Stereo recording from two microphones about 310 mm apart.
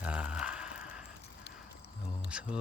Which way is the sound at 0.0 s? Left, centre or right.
Centre.